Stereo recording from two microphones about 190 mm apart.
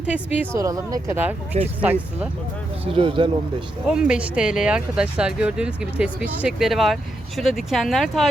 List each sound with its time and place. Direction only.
0.0 s speech: 5° right (ahead or behind)
2.8 s speech: 25° right (ahead or behind)
3.8 s speech: 5° right (ahead or behind)